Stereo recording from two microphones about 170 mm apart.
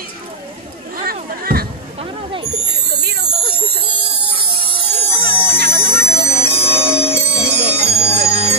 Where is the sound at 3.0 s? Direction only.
65° right (ahead or behind).